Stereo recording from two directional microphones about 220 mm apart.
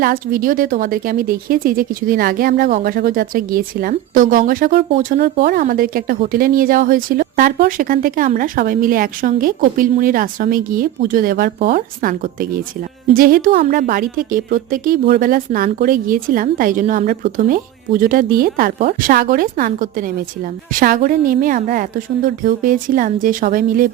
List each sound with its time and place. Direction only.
0.0 s speech: 40° right (ahead or behind)